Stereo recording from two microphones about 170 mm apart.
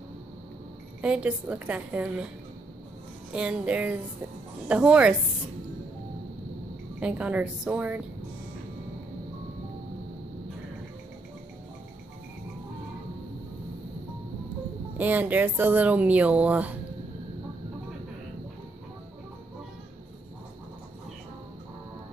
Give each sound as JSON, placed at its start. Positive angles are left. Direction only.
{"t": 1.0, "sound": "speech", "side_deg": -5}
{"t": 3.3, "sound": "speech", "side_deg": -5}
{"t": 7.0, "sound": "speech", "side_deg": -5}
{"t": 15.0, "sound": "speech", "side_deg": -10}